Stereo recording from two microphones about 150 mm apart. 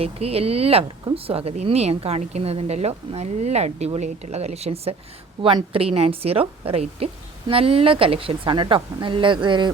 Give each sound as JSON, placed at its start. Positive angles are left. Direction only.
{"t": 0.0, "sound": "a woman's voice", "side_deg": -40}